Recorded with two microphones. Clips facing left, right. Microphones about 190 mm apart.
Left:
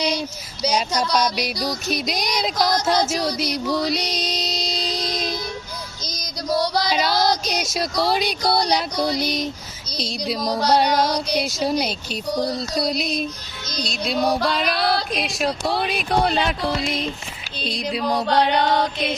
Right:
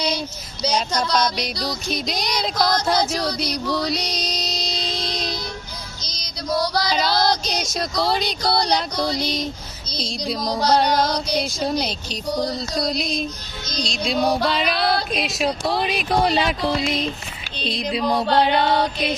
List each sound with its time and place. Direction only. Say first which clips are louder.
0.6 s a sound: left 1 dB; 10° left (ahead or behind)
1.9 s child singing: left 1 dB; 5° left (ahead or behind)
2.6 s a sound: even; 15° left (ahead or behind)
3.1 s child singing: left 1 dB; 5° left (ahead or behind)
3.8 s music: left 1 dB; centre (ahead or behind)
4.9 s a sound: left 2 dB; 45° left (ahead or behind)
6.0 s music: left 5 dB; 45° left (ahead or behind)
6.5 s female singing: left 1 dB; 30° left (ahead or behind)
6.9 s a sound: right 1 dB; 5° left (ahead or behind)
9.9 s child singing: left 1 dB; 5° left (ahead or behind)
14.3 s female singing: right 1 dB; centre (ahead or behind)
15.1 s child singing: right 1 dB; centre (ahead or behind)
17.6 s child singing: right 1 dB; 5° left (ahead or behind)